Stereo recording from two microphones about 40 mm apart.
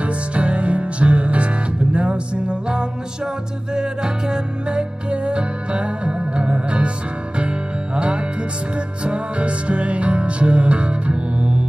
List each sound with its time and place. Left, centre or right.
0.0 s music: right